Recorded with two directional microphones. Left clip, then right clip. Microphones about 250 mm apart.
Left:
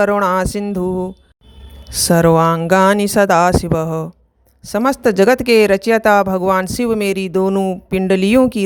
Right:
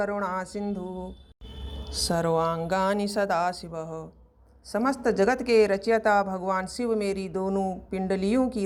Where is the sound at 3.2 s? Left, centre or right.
Left.